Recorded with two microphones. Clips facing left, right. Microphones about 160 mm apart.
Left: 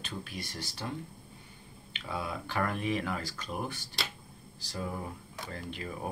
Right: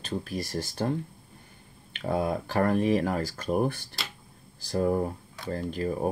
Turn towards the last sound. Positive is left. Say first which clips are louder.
# right 10 dB
turn(degrees=-40)  # may be behind; listen again after turning